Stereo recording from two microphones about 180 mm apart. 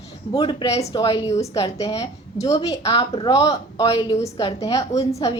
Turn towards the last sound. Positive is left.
turn(degrees=20)  # may be behind; listen again after turning